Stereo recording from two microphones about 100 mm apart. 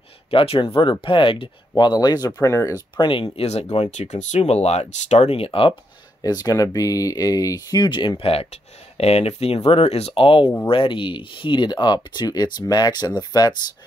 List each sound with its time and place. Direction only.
0.3 s speech: 65° left (ahead or behind)
1.8 s speech: 45° left (ahead or behind)
2.4 s speech: 30° left (ahead or behind)
3.0 s speech: 60° left (ahead or behind)
3.3 s speech: 90° left; by 5.8 s 65° left (ahead or behind)
6.2 s speech: 35° left (ahead or behind)
7.9 s speech: 55° left (ahead or behind)
8.3 s speech: 85° left; by 13.6 s 45° left (ahead or behind)